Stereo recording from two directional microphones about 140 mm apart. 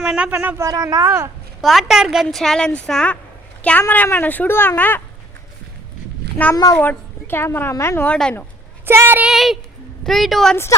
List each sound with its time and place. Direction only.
0.0 s speech: 5° right (ahead or behind)
0.3 s speech: 20° right (ahead or behind)
1.6 s speech: centre (ahead or behind)
6.7 s speech: 15° left (ahead or behind)
8.0 s speech: 10° left (ahead or behind)
8.9 s a woman's voice: 15° right (ahead or behind)
9.3 s a sound: centre (ahead or behind)
10.0 s speech: centre (ahead or behind)